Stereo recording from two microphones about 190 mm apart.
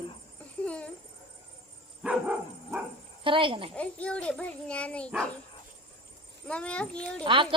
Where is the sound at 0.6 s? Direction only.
5° left (ahead or behind).